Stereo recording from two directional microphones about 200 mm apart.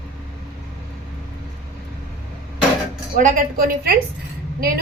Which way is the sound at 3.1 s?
45° right (ahead or behind).